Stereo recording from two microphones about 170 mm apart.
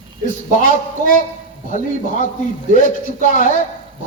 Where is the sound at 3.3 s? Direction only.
50° left (ahead or behind).